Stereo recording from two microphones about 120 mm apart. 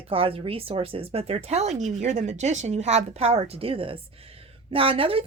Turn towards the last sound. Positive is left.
turn(degrees=-50)  # may be behind; listen again after turning